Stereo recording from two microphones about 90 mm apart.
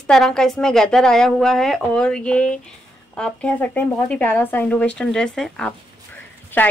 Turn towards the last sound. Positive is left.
turn(degrees=20)  # may be behind; listen again after turning